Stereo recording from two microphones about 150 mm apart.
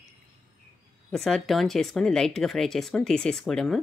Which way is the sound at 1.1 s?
Centre (ahead or behind).